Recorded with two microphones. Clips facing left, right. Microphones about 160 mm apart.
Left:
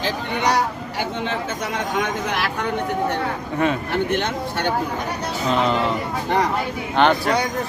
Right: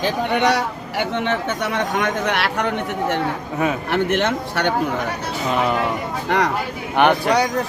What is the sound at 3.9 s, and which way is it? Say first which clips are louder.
Speech: right 3 dB; 70° right (ahead or behind).